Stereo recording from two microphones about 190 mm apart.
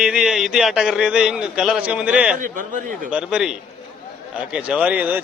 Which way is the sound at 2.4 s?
45° right (ahead or behind).